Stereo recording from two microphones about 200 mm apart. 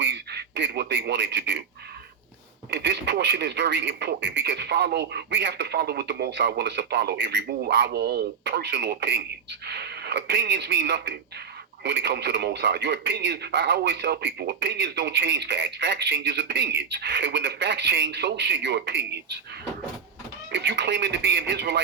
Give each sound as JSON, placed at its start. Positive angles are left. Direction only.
{"t": 0.0, "sound": "speech", "side_deg": -55}
{"t": 2.6, "sound": "speech", "side_deg": -60}
{"t": 20.5, "sound": "speech", "side_deg": -60}